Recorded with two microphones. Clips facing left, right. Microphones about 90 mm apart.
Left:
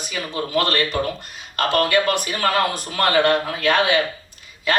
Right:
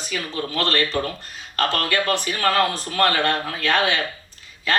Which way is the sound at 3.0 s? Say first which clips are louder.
Left 6 dB; 25° left (ahead or behind).